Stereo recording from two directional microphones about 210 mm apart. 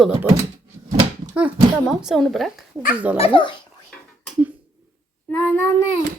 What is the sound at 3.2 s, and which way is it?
Speech, 25° left (ahead or behind).